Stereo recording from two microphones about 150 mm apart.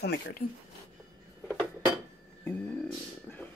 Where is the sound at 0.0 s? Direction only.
85° left.